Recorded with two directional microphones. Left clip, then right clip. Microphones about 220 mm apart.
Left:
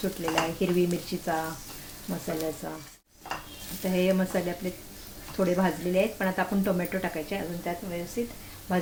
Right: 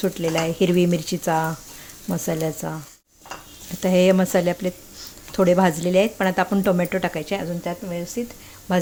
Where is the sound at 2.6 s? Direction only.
50° right (ahead or behind).